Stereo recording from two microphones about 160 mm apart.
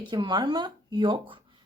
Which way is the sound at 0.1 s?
25° right (ahead or behind).